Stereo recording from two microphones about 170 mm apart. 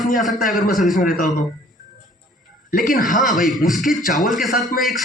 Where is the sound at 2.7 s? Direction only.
55° left (ahead or behind).